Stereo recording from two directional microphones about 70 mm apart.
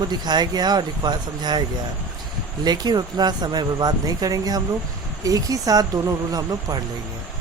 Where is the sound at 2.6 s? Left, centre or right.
Right.